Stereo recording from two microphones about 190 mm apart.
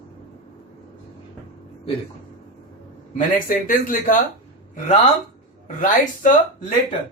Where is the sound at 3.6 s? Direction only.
45° left (ahead or behind).